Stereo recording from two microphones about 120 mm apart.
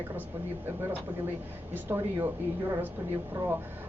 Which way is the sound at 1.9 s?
20° right (ahead or behind).